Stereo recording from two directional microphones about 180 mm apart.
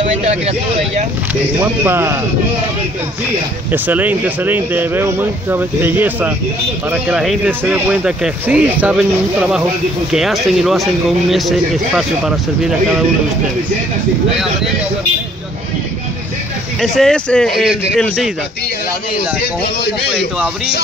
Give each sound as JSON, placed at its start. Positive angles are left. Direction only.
{"t": 0.0, "sound": "speech", "side_deg": -40}
{"t": 1.6, "sound": "speech", "side_deg": -10}
{"t": 3.7, "sound": "speech", "side_deg": -10}
{"t": 16.8, "sound": "speech", "side_deg": 5}
{"t": 19.4, "sound": "a man's voice", "side_deg": 65}